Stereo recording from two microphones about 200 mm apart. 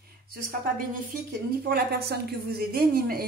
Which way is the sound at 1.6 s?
55° right (ahead or behind).